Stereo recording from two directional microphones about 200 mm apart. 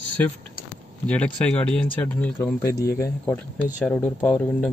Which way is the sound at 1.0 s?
5° left (ahead or behind).